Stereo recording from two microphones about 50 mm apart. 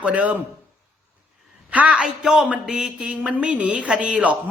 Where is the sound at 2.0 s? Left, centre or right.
Centre; by 4.4 s right.